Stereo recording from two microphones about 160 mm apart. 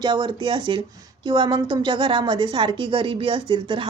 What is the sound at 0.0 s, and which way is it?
A woman's voice, 25° right (ahead or behind).